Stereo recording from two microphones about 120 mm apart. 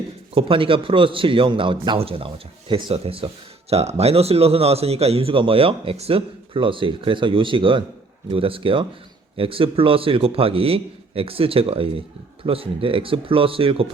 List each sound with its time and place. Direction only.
0.3 s a man's voice: 45° right (ahead or behind)
2.0 s a man's voice: 50° right (ahead or behind)